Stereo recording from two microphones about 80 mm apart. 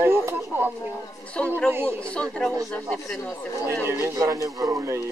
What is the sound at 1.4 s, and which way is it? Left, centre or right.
Speech, centre.